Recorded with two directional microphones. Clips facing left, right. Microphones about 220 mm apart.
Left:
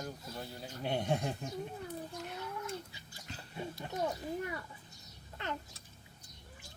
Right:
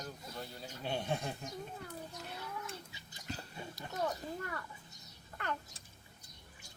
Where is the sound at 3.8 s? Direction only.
15° left (ahead or behind).